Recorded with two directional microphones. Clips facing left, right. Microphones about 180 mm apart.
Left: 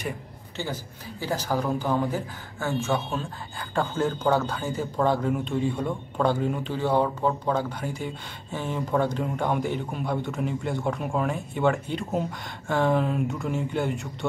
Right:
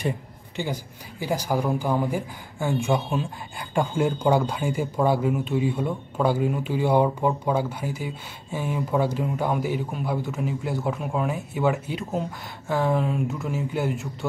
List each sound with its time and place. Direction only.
0.6 s speech: 15° right (ahead or behind)